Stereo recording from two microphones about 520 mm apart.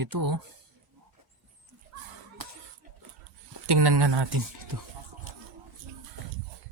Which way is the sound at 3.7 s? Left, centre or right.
Right.